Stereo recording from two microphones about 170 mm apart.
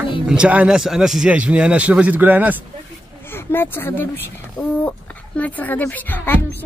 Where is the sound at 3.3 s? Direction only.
10° left (ahead or behind).